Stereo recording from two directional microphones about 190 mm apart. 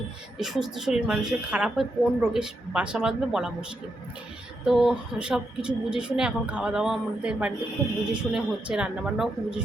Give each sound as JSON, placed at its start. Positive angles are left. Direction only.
{"t": 0.3, "sound": "a woman's voice", "side_deg": 0}